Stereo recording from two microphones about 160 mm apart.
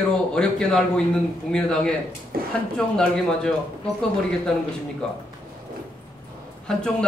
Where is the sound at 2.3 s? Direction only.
65° right (ahead or behind).